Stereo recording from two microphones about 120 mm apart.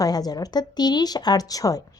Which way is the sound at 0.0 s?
35° left (ahead or behind).